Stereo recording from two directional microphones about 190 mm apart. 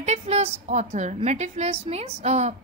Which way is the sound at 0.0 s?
35° right (ahead or behind).